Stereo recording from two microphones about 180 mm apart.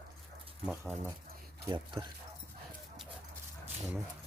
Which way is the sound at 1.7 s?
25° right (ahead or behind).